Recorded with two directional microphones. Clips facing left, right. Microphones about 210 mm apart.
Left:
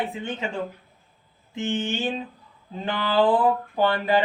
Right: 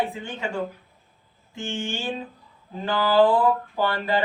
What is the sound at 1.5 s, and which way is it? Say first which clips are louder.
Speech: left 4 dB; 20° left (ahead or behind).